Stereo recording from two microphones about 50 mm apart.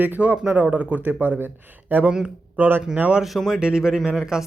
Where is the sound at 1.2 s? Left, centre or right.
Right.